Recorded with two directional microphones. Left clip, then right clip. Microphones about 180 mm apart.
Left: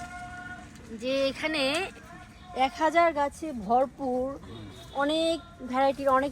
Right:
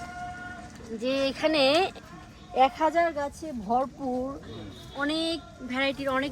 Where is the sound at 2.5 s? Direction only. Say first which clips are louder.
Right 5 dB; 15° right (ahead or behind).